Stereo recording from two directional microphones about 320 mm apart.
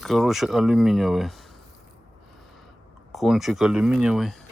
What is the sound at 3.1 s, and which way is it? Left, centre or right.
Speech, centre.